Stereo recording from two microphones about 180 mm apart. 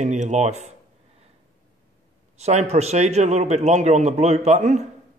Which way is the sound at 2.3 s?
35° right (ahead or behind).